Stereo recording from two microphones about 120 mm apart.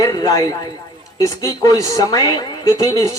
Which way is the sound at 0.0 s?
30° left (ahead or behind).